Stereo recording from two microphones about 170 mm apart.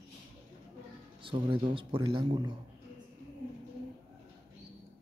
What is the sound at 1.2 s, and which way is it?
Speech, 30° right (ahead or behind).